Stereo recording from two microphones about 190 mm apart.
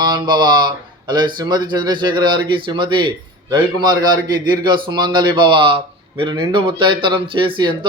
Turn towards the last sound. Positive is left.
turn(degrees=-25)  # may be behind; listen again after turning